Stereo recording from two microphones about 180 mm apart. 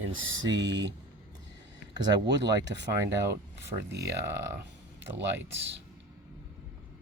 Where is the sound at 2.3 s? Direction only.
75° right (ahead or behind).